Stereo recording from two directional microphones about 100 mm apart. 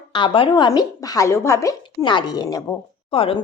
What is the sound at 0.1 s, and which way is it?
Speech, 55° left (ahead or behind).